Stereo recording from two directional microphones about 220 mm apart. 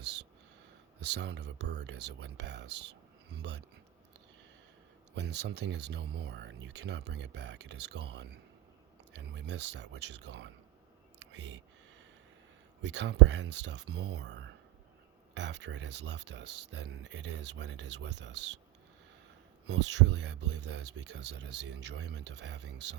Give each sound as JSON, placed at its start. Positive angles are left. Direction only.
{"t": 0.0, "sound": "a sound", "side_deg": -50}
{"t": 0.9, "sound": "speech", "side_deg": -50}
{"t": 5.1, "sound": "speech", "side_deg": -50}
{"t": 12.8, "sound": "speech", "side_deg": -55}
{"t": 19.6, "sound": "speech", "side_deg": -50}